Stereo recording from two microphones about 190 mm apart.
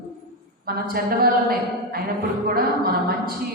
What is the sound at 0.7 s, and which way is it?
A woman's voice, 50° right (ahead or behind).